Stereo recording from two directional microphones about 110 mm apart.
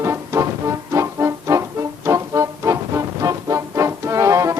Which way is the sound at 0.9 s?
30° right (ahead or behind).